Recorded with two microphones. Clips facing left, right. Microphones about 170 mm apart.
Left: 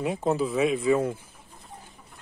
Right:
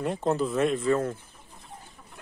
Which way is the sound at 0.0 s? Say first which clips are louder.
Left 1 dB; 5° left (ahead or behind).